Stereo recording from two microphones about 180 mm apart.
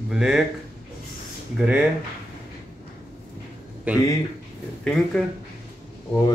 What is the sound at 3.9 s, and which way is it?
Speech, 10° right (ahead or behind).